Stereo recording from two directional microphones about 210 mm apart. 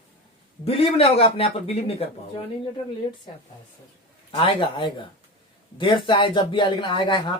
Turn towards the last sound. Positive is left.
turn(degrees=25)  # may be behind; listen again after turning